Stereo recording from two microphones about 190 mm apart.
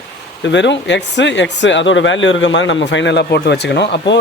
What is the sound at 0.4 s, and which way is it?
Speech, 70° left (ahead or behind).